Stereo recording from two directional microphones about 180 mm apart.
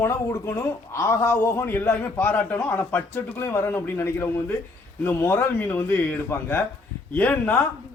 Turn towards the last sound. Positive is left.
turn(degrees=10)  # may be behind; listen again after turning